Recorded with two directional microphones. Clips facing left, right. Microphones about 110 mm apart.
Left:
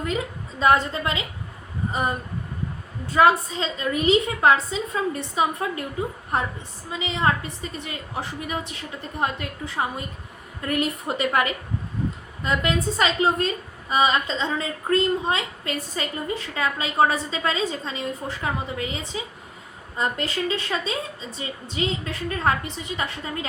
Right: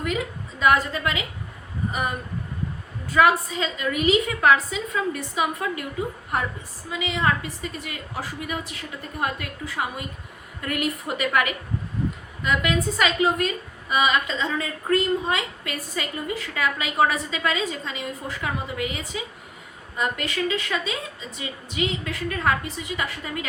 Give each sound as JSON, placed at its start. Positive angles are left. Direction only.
{"t": 0.6, "sound": "a woman's voice", "side_deg": 30}